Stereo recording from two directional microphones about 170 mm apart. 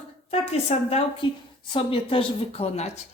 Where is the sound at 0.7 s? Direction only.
40° left (ahead or behind).